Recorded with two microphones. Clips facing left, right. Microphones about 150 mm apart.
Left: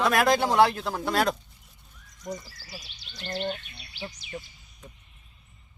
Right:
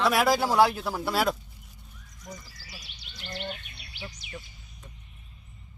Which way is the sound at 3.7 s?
25° left (ahead or behind).